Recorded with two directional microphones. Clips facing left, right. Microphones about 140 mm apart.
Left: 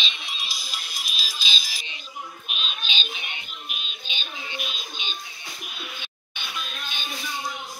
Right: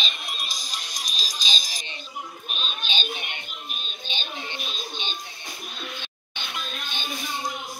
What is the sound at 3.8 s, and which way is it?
Music, 10° left (ahead or behind).